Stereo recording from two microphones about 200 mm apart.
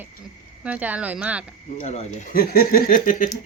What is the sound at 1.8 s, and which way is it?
Speech, 35° left (ahead or behind).